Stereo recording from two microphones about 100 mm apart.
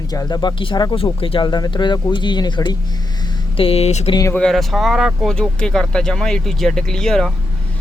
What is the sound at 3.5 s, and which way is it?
Speech, 70° left (ahead or behind).